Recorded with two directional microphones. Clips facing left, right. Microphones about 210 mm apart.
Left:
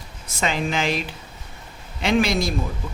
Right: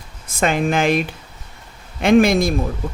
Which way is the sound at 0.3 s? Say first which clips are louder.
Right 6 dB; 55° right (ahead or behind).